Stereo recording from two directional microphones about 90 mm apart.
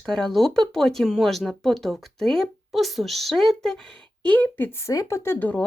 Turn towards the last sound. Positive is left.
turn(degrees=15)  # may be behind; listen again after turning